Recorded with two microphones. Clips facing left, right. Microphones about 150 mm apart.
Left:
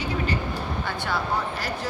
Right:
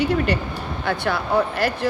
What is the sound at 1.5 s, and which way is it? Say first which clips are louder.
Speech: right 8 dB; 65° right (ahead or behind).